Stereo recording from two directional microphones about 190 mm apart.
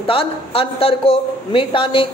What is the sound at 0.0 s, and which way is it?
Speech, 30° left (ahead or behind).